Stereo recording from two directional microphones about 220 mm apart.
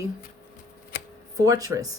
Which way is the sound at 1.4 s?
15° right (ahead or behind).